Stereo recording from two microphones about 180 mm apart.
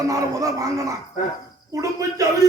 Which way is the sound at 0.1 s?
20° right (ahead or behind).